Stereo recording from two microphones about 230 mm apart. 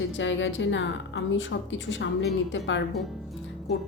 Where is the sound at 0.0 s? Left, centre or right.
Left.